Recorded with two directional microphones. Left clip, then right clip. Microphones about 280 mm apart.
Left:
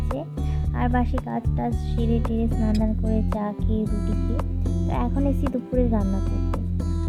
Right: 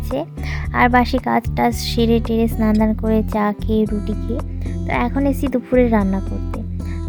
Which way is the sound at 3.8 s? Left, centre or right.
Centre.